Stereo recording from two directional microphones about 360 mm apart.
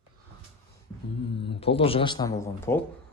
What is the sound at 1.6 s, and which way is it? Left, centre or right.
Speech, centre.